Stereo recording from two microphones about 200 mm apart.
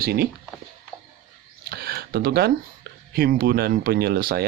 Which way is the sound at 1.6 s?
50° right (ahead or behind).